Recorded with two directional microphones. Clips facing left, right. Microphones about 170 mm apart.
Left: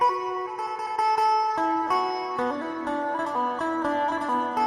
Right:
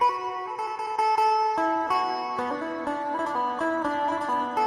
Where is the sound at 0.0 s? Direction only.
Centre (ahead or behind).